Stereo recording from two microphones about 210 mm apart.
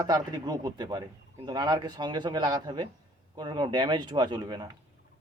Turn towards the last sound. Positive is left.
turn(degrees=-20)  # may be behind; listen again after turning